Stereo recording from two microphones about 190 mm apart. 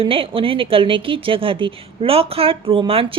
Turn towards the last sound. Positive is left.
turn(degrees=-30)  # may be behind; listen again after turning